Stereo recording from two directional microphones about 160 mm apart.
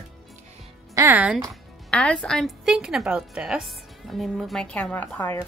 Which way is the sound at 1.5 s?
5° left (ahead or behind).